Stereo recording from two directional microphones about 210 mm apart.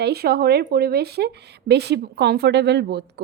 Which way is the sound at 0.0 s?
50° right (ahead or behind).